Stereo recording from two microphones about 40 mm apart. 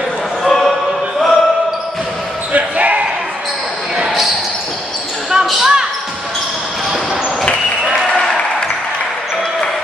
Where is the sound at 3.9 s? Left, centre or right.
Centre.